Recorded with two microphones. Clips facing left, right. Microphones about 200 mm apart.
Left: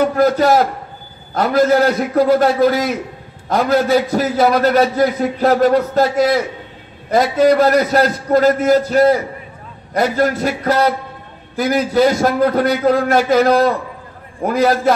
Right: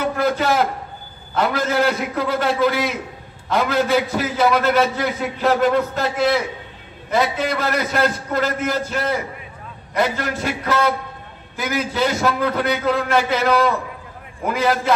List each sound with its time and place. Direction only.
0.0 s a man's voice: 40° left (ahead or behind)